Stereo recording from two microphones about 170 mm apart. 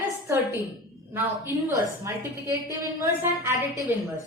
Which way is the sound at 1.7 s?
15° right (ahead or behind).